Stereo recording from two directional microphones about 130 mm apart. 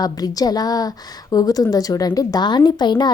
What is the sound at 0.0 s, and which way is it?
A woman's voice, 30° left (ahead or behind).